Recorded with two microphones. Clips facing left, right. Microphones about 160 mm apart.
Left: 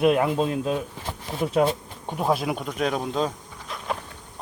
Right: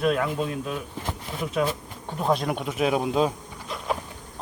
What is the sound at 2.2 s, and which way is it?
Speech, 5° left (ahead or behind).